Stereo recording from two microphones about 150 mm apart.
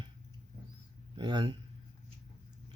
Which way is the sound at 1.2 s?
30° right (ahead or behind).